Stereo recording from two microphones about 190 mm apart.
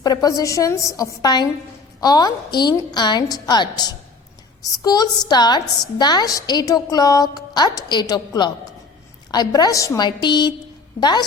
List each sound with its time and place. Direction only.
0.0 s a woman's voice: 20° left (ahead or behind)